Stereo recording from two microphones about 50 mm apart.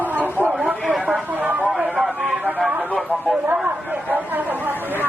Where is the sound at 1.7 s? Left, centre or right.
Centre.